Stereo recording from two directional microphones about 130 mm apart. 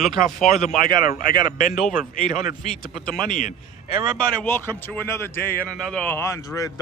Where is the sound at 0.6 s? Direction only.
85° left.